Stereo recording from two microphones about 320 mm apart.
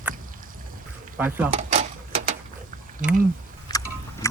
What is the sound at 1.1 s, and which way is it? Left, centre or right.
Speech, centre.